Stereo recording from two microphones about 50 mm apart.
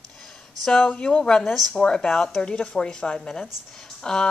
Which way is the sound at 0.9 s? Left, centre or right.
Left.